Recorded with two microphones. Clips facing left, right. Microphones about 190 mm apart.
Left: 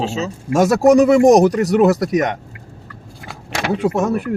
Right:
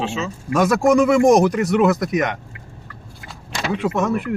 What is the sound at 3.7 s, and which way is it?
Speech, 40° left (ahead or behind).